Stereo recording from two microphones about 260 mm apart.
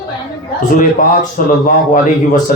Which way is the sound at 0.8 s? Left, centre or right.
Left.